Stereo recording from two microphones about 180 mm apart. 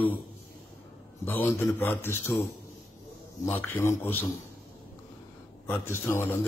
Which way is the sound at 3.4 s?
10° left (ahead or behind).